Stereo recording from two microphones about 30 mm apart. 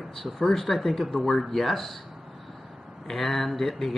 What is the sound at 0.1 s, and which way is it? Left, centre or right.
Speech, centre.